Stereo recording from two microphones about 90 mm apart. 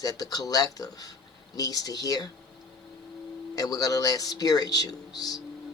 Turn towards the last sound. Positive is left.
turn(degrees=45)  # may be behind; listen again after turning